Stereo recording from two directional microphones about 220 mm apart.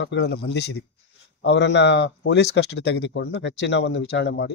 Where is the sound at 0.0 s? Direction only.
50° left (ahead or behind).